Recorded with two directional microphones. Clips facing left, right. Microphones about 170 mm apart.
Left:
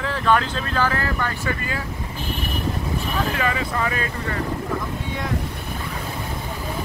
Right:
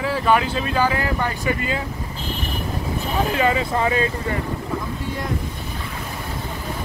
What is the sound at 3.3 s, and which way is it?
Speech, 25° right (ahead or behind).